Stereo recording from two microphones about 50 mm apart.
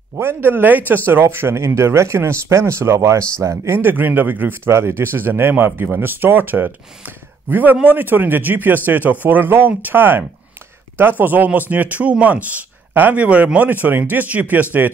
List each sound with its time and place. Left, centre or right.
0.2 s speech: right
1.2 s speech: right
4.6 s a man's voice: right